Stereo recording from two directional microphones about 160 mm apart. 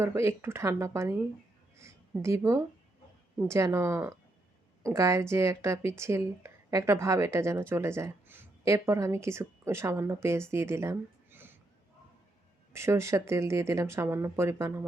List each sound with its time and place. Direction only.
0.0 s a woman's voice: 15° right (ahead or behind)
12.7 s a woman's voice: 15° right (ahead or behind)